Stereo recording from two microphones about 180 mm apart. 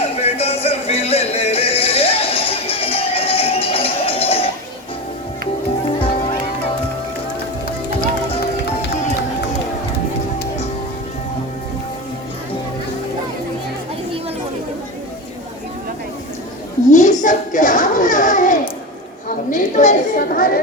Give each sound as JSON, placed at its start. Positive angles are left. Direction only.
{"t": 0.2, "sound": "music", "side_deg": 35}
{"t": 16.9, "sound": "a sound", "side_deg": 40}
{"t": 19.5, "sound": "chatter", "side_deg": 45}